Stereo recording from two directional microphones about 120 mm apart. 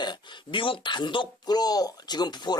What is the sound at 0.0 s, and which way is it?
Speech, 40° left (ahead or behind).